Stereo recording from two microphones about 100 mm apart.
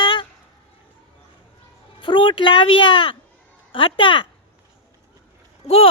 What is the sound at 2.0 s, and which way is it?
Speech, 55° left (ahead or behind).